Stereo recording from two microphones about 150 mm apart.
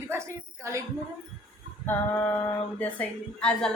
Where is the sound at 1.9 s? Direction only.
15° left (ahead or behind).